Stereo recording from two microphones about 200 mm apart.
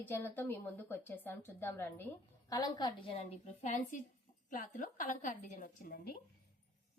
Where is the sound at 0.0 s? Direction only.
10° left (ahead or behind).